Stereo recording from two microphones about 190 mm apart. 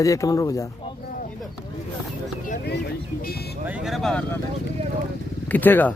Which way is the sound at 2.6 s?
60° left (ahead or behind).